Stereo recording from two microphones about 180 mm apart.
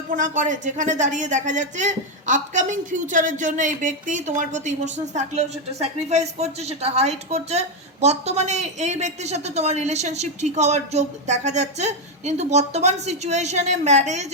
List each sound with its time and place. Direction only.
0.1 s a woman's voice: 45° right (ahead or behind)